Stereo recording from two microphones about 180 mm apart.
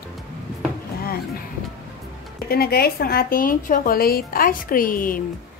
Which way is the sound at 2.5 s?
60° left (ahead or behind).